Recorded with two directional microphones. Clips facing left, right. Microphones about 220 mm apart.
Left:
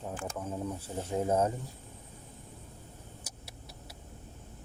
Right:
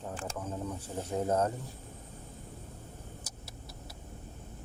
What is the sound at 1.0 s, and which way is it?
Speech, 10° left (ahead or behind).